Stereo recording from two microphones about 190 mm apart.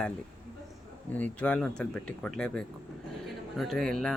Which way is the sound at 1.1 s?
5° left (ahead or behind).